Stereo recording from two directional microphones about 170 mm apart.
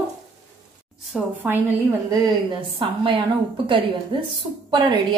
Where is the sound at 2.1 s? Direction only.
30° right (ahead or behind).